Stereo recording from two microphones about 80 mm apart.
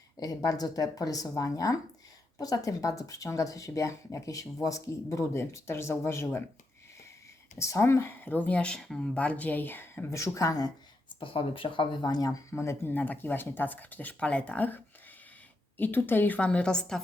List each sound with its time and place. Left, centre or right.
0.2 s speech: left
7.6 s speech: left
11.7 s speech: left
13.0 s speech: left
15.8 s speech: left